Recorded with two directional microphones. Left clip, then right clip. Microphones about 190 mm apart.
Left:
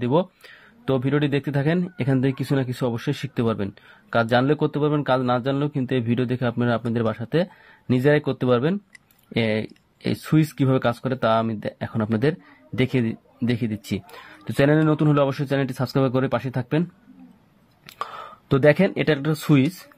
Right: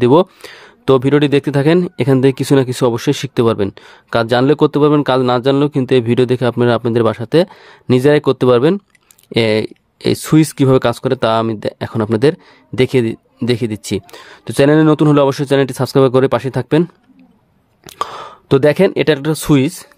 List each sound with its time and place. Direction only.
0.0 s speech: 65° right (ahead or behind)
17.8 s speech: 50° right (ahead or behind)